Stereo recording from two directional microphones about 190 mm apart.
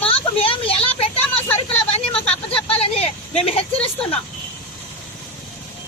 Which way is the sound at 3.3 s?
30° left (ahead or behind).